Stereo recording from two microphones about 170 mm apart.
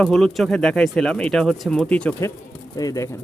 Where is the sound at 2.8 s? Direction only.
20° left (ahead or behind).